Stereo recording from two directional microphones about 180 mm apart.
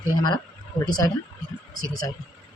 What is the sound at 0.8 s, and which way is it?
Speech, 20° left (ahead or behind).